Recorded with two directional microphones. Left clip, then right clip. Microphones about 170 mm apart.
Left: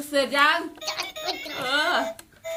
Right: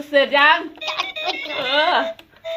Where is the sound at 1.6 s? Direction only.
35° left (ahead or behind).